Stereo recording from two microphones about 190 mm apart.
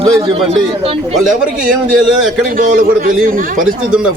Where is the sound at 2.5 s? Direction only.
45° right (ahead or behind).